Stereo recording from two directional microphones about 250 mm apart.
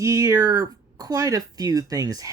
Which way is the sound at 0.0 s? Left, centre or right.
Centre.